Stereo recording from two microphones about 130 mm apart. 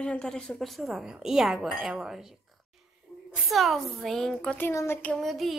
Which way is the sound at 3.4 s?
Centre (ahead or behind).